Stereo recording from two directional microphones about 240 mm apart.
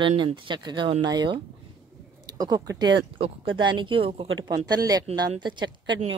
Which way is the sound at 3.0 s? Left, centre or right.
Right.